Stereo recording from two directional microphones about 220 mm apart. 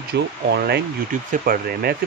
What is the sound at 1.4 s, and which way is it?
Speech, 45° right (ahead or behind).